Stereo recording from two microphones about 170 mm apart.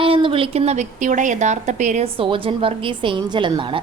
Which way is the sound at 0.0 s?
30° right (ahead or behind).